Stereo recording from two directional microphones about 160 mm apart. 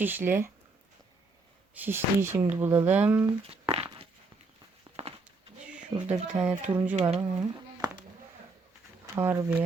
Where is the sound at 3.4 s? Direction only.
35° right (ahead or behind).